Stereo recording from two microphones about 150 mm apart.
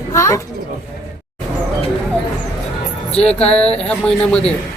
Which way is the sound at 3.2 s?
40° left (ahead or behind).